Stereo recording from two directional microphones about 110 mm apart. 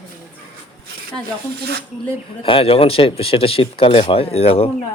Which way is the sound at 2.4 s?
55° left (ahead or behind).